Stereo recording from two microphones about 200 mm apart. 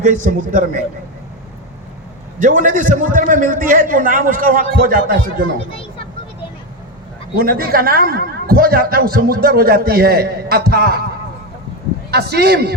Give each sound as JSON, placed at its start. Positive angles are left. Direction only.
{"t": 0.3, "sound": "a man's voice", "side_deg": -40}
{"t": 2.4, "sound": "a man's voice", "side_deg": -40}
{"t": 7.3, "sound": "a man's voice", "side_deg": -50}
{"t": 12.1, "sound": "a man's voice", "side_deg": -55}